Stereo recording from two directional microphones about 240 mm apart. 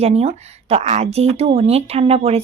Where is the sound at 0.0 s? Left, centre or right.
Right.